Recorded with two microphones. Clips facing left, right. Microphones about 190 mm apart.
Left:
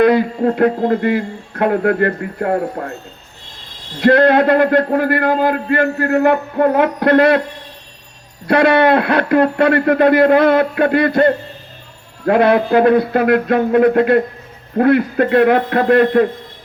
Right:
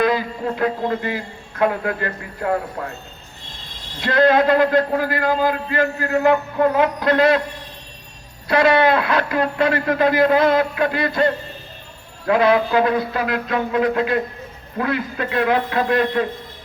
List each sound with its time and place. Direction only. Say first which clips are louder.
0.0 s a man's voice: left 7 dB; 60° left (ahead or behind)
4.0 s a man's voice: left 5 dB; 60° left (ahead or behind)
8.4 s a man's voice: left 4 dB; 60° left (ahead or behind)